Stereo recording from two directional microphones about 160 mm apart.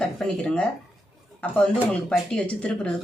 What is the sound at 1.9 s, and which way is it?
Speech, 5° left (ahead or behind).